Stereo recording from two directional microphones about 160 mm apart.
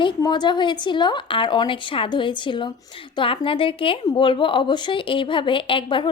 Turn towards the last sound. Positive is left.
turn(degrees=30)  # may be behind; listen again after turning